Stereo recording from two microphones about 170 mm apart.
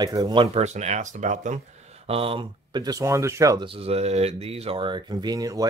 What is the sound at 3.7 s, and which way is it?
A man's voice, 35° right (ahead or behind).